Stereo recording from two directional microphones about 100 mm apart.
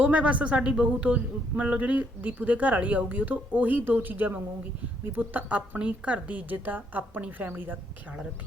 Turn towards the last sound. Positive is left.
turn(degrees=-20)  # may be behind; listen again after turning